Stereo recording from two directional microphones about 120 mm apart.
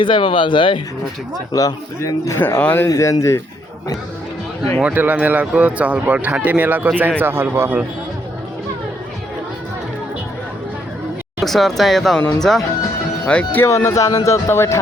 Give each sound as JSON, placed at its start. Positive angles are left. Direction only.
{"t": 0.0, "sound": "speech", "side_deg": 45}
{"t": 1.5, "sound": "speech", "side_deg": 30}
{"t": 4.8, "sound": "speech", "side_deg": -10}
{"t": 11.3, "sound": "speech", "side_deg": 0}
{"t": 13.7, "sound": "speech", "side_deg": 25}